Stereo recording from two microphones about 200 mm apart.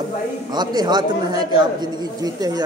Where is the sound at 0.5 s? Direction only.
20° right (ahead or behind).